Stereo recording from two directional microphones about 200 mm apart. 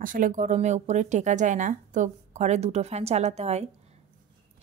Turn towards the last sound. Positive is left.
turn(degrees=-30)  # may be behind; listen again after turning